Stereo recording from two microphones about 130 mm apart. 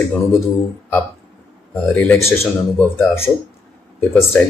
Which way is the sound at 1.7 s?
10° left (ahead or behind).